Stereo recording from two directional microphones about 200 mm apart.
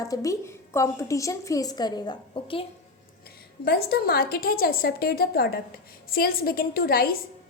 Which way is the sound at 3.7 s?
50° left (ahead or behind).